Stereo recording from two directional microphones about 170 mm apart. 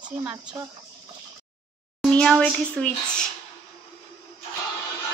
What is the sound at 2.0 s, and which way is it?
A child's voice, 5° left (ahead or behind).